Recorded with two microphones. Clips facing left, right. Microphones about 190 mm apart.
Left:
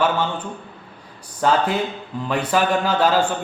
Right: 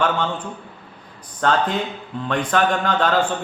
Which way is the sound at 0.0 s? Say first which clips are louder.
Left 1 dB; 5° left (ahead or behind).